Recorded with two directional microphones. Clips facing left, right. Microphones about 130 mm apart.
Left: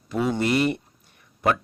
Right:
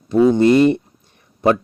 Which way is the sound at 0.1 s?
25° right (ahead or behind).